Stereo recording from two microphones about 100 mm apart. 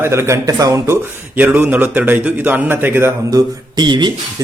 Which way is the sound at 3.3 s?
45° right (ahead or behind).